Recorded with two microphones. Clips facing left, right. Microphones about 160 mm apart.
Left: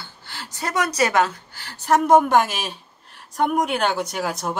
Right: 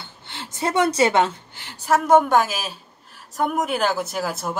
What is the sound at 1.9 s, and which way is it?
A woman's voice, 5° right (ahead or behind).